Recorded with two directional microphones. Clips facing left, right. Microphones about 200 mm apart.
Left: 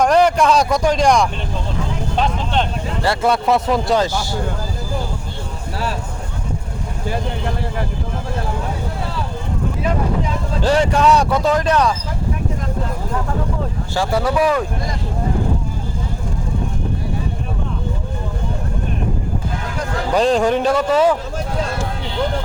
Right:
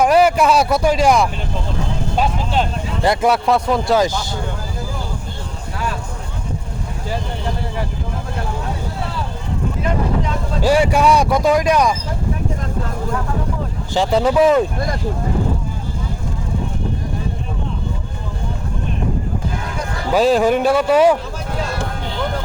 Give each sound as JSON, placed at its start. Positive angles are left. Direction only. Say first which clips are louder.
{"t": 0.0, "sound": "speech", "louder": "right 1 dB", "side_deg": -5}
{"t": 3.0, "sound": "speech", "louder": "right 3 dB", "side_deg": -20}
{"t": 3.2, "sound": "speech", "louder": "left 1 dB", "side_deg": 0}
{"t": 4.0, "sound": "speech", "louder": "right 1 dB", "side_deg": -20}
{"t": 10.6, "sound": "speech", "louder": "right 1 dB", "side_deg": -10}
{"t": 13.9, "sound": "speech", "louder": "right 4 dB", "side_deg": -20}
{"t": 20.1, "sound": "speech", "louder": "right 2 dB", "side_deg": -5}